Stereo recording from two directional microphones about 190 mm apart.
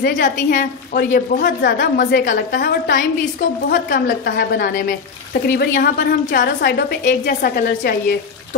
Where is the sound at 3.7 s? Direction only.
60° left (ahead or behind).